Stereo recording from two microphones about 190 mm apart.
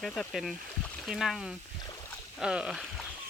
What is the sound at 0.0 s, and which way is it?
Speech, 5° left (ahead or behind).